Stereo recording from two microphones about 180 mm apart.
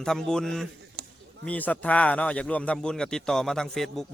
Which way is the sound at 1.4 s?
10° left (ahead or behind).